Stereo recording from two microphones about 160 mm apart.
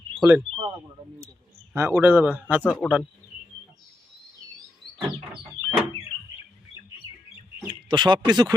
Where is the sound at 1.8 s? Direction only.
15° right (ahead or behind).